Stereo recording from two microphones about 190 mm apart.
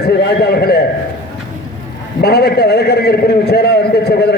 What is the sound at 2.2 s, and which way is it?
A man's voice, 60° left (ahead or behind).